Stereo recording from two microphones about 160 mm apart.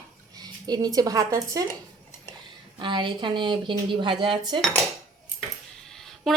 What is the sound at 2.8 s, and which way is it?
A woman's voice, 30° right (ahead or behind).